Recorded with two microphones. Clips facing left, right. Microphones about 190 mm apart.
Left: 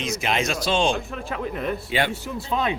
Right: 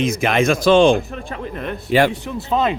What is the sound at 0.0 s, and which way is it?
Speech, 55° right (ahead or behind).